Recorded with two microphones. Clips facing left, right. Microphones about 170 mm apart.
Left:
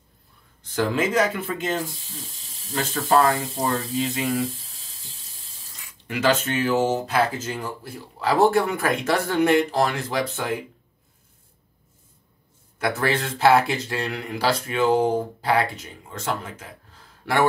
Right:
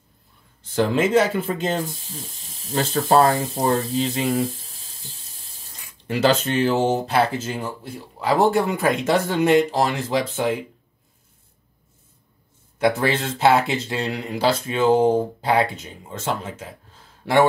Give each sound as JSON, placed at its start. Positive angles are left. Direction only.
{"t": 0.7, "sound": "speech", "side_deg": -30}
{"t": 6.0, "sound": "speech", "side_deg": -30}
{"t": 12.8, "sound": "speech", "side_deg": -20}